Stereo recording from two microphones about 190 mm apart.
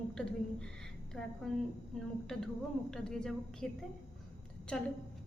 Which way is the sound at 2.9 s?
5° left (ahead or behind).